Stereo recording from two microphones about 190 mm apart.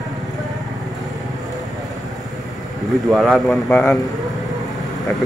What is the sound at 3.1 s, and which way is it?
Speech, centre (ahead or behind).